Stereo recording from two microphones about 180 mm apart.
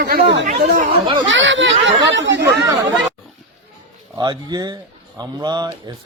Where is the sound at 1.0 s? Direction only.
25° right (ahead or behind).